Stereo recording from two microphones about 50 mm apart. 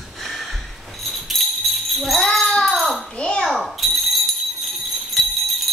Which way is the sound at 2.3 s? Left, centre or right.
Centre.